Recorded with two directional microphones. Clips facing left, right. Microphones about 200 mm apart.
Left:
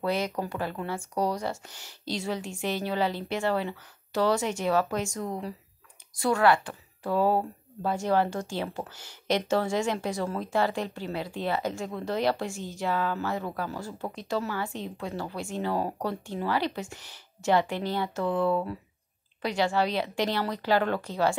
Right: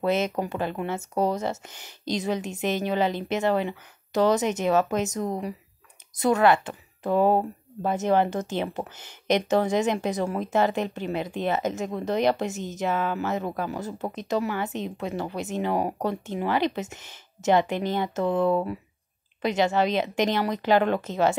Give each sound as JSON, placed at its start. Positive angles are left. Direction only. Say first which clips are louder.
{"t": 0.0, "sound": "speech", "louder": "right 4 dB", "side_deg": -20}